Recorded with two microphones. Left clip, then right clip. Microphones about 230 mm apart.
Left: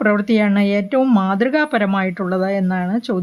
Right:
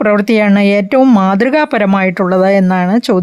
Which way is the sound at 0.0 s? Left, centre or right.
Right.